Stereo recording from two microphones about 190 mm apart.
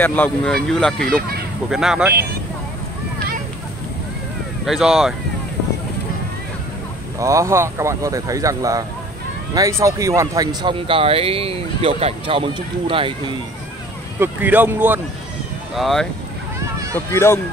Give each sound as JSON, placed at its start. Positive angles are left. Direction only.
{"t": 0.0, "sound": "speech", "side_deg": 10}
{"t": 4.6, "sound": "speech", "side_deg": 0}
{"t": 7.2, "sound": "speech", "side_deg": -15}
{"t": 14.2, "sound": "speech", "side_deg": -10}
{"t": 15.7, "sound": "speech", "side_deg": 0}
{"t": 17.1, "sound": "speech", "side_deg": 15}